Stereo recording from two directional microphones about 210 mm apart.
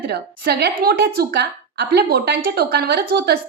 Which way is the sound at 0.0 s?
50° right (ahead or behind).